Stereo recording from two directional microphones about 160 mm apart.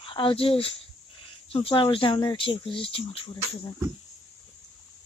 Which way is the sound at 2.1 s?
30° left (ahead or behind).